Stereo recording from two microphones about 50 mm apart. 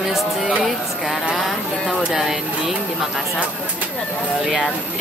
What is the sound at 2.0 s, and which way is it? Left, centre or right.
Speech, centre.